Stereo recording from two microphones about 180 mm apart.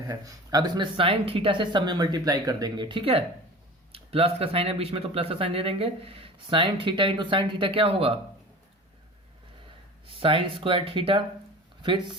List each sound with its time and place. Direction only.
0.1 s speech: 20° right (ahead or behind)
10.2 s speech: 30° right (ahead or behind)